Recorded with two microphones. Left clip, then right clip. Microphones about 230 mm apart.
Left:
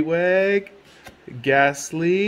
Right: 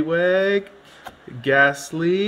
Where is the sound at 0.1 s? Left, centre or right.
Right.